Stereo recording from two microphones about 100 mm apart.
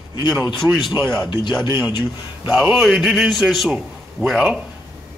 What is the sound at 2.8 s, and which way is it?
A man's voice, centre (ahead or behind).